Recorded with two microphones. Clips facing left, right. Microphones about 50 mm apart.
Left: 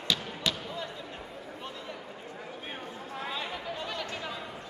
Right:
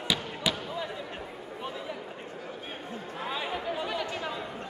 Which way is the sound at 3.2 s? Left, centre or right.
Centre.